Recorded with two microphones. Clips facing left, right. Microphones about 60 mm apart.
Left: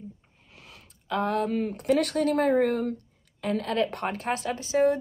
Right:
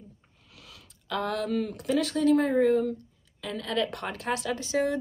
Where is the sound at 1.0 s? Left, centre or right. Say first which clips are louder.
Left 3 dB; left.